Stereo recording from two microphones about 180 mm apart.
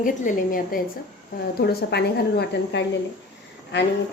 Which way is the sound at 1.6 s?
65° left (ahead or behind).